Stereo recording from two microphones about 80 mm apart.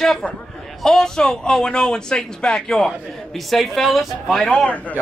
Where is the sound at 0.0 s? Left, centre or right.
Centre.